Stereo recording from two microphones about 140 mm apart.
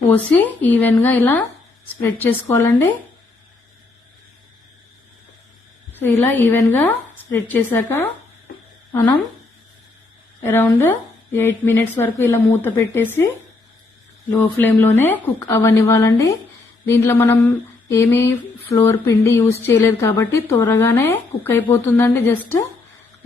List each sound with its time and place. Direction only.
0.1 s a woman's voice: 15° left (ahead or behind)
5.9 s a woman's voice: 15° left (ahead or behind)
10.4 s a woman's voice: 15° left (ahead or behind)
14.3 s a woman's voice: 15° left (ahead or behind)